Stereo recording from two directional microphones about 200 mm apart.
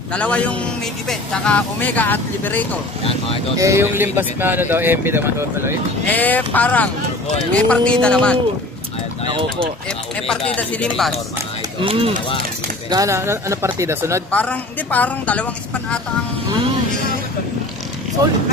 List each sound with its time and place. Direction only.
0.1 s speech: 5° left (ahead or behind)
3.5 s speech: 15° right (ahead or behind)
6.0 s speech: 10° left (ahead or behind)
9.2 s speech: 25° right (ahead or behind)
9.8 s speech: 5° left (ahead or behind)
11.8 s speech: 30° right (ahead or behind)
12.9 s speech: 15° right (ahead or behind)
14.3 s speech: 5° left (ahead or behind)